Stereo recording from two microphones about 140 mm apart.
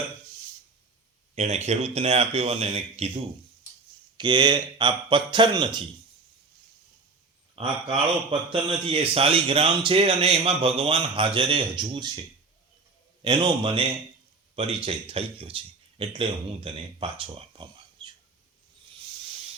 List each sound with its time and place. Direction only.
1.4 s speech: 50° right (ahead or behind)
4.2 s a man's voice: 30° right (ahead or behind)
7.5 s a man's voice: 40° right (ahead or behind)
13.2 s a man's voice: 35° right (ahead or behind)